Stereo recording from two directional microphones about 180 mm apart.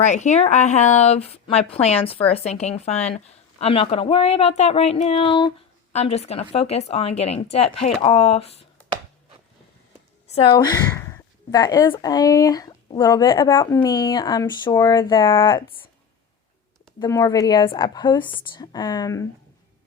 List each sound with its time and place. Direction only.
0.0 s speech: 40° left (ahead or behind)
10.2 s a woman's voice: 30° left (ahead or behind)
17.0 s a woman's voice: 20° left (ahead or behind)